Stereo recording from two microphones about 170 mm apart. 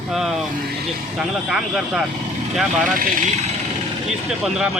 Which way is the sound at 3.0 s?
55° right (ahead or behind).